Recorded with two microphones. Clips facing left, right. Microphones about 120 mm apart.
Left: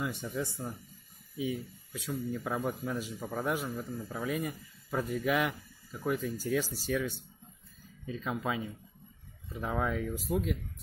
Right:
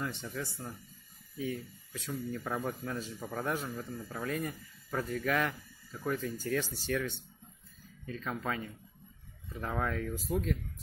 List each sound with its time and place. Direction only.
0.0 s speech: 10° left (ahead or behind)
1.4 s speech: 10° left (ahead or behind)